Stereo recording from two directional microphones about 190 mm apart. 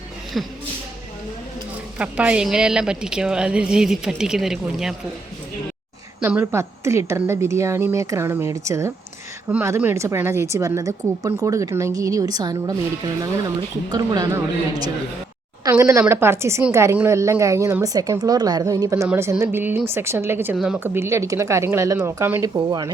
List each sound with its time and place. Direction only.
0.4 s a woman's voice: centre (ahead or behind)
2.0 s a woman's voice: 5° right (ahead or behind)
6.1 s a woman's voice: 10° right (ahead or behind)